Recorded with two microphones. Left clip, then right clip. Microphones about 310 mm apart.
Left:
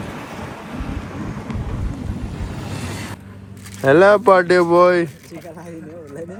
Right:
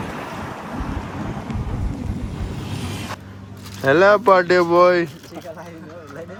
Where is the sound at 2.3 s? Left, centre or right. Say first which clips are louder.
Left 1 dB; centre.